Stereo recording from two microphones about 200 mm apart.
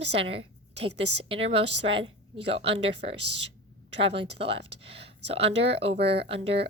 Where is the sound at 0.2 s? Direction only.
30° right (ahead or behind).